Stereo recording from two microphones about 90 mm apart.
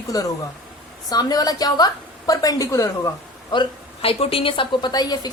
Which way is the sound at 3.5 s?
90° left.